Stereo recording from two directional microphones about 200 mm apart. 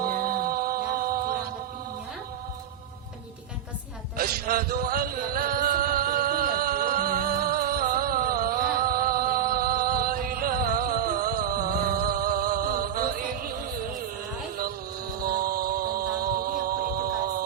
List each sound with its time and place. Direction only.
0.0 s music: 45° right (ahead or behind)
4.2 s music: 45° right (ahead or behind)
15.2 s music: 45° right (ahead or behind)